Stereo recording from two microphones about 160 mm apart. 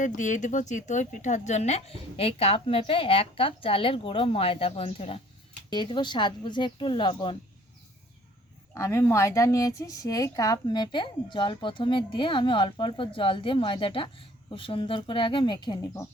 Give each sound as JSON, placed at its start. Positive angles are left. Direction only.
{"t": 0.0, "sound": "a woman's voice", "side_deg": 50}
{"t": 8.7, "sound": "a woman's voice", "side_deg": 15}